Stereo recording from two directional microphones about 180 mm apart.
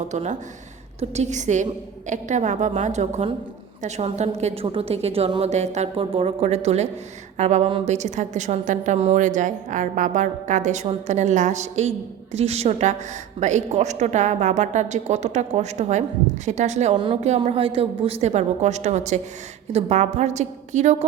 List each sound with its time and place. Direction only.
0.1 s a woman's voice: 40° right (ahead or behind)